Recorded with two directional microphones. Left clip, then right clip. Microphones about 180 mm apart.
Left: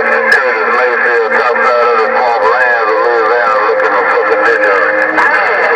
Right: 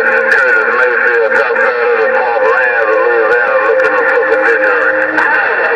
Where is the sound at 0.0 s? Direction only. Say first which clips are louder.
Even; 40° left (ahead or behind).